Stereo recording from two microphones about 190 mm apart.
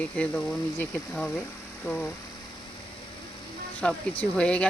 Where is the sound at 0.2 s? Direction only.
5° left (ahead or behind).